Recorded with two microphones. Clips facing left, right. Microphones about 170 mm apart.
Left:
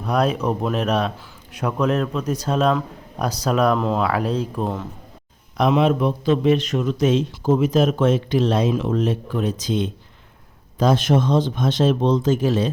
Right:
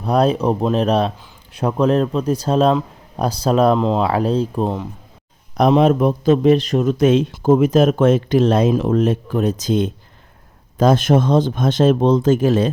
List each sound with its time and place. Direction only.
0.0 s speech: 30° right (ahead or behind)
5.5 s speech: 40° right (ahead or behind)
7.0 s speech: 55° right (ahead or behind)